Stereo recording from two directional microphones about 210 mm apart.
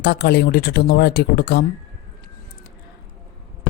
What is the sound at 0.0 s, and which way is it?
Speech, 50° left (ahead or behind).